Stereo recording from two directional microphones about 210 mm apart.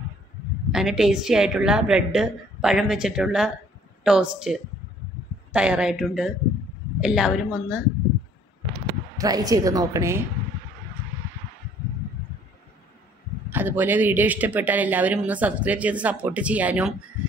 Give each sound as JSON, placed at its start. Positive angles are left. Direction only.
{"t": 0.7, "sound": "a woman's voice", "side_deg": -5}
{"t": 9.2, "sound": "speech", "side_deg": -15}
{"t": 13.5, "sound": "speech", "side_deg": -10}